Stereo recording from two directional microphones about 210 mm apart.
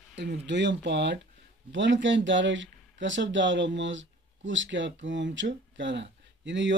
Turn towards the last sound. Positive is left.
turn(degrees=-60)  # may be behind; listen again after turning